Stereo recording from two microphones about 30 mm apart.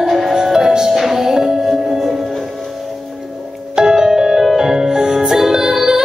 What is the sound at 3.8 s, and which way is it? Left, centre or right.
Music, right.